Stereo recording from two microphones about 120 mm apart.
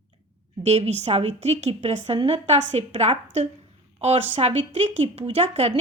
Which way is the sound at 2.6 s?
70° right (ahead or behind).